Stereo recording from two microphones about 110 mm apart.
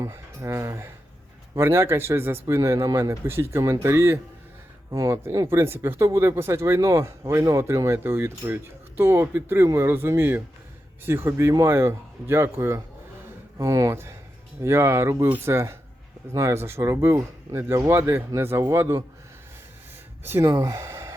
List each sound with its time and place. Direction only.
0.0 s speech: 25° right (ahead or behind)
20.2 s speech: 20° right (ahead or behind)
20.5 s speech: 30° right (ahead or behind)